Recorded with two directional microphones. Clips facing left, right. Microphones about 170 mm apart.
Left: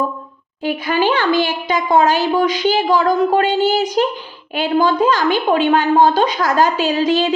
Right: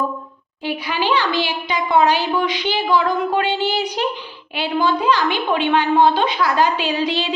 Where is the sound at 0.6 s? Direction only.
45° left (ahead or behind).